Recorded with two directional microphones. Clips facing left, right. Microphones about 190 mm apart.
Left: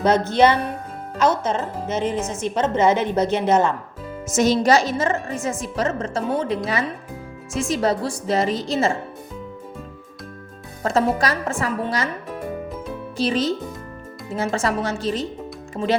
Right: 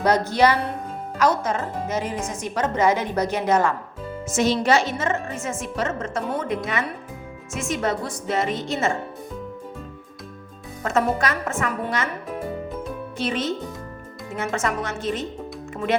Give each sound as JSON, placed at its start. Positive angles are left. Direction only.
{"t": 0.3, "sound": "a woman's voice", "side_deg": 25}
{"t": 4.4, "sound": "a woman's voice", "side_deg": 45}
{"t": 10.8, "sound": "a woman's voice", "side_deg": 35}
{"t": 13.1, "sound": "a woman's voice", "side_deg": 35}